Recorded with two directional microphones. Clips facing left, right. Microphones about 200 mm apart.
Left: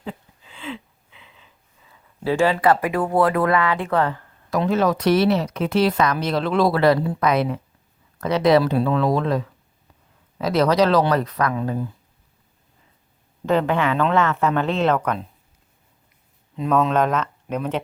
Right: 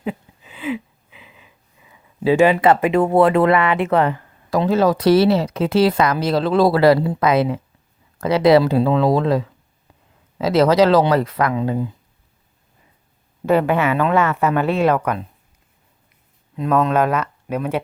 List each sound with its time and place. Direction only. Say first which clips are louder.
0.0 s a sound: right 7 dB; 15° right (ahead or behind)
1.9 s speech: right 6 dB; 15° right (ahead or behind)
4.5 s speech: right 3 dB; 30° right (ahead or behind)
13.4 s speech: right 3 dB; 10° right (ahead or behind)
16.6 s speech: right 2 dB; centre (ahead or behind)